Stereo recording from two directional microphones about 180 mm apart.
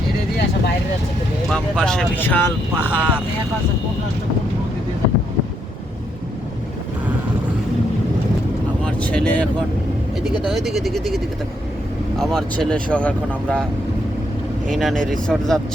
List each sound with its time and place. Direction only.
1.5 s speech: 5° left (ahead or behind)
2.9 s speech: 5° right (ahead or behind)
8.8 s speech: 5° left (ahead or behind)
14.7 s speech: centre (ahead or behind)